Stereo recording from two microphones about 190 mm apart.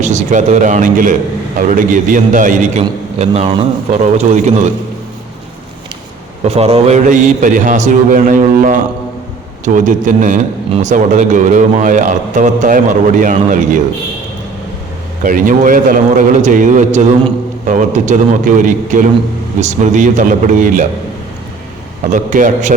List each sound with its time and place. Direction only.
0.0 s a man's voice: 40° right (ahead or behind)
6.4 s a man's voice: 35° right (ahead or behind)
15.2 s a man's voice: 45° right (ahead or behind)
22.1 s a man's voice: 40° right (ahead or behind)